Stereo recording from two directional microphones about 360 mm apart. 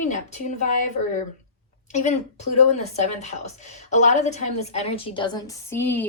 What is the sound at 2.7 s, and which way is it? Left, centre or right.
A woman's voice, centre.